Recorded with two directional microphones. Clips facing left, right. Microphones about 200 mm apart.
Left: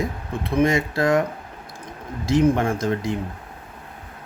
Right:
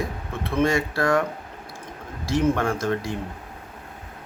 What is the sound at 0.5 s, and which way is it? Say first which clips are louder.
Speech: left 2 dB; 20° left (ahead or behind).